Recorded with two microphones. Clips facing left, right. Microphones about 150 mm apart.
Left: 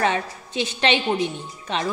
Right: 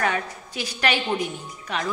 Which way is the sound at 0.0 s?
25° left (ahead or behind).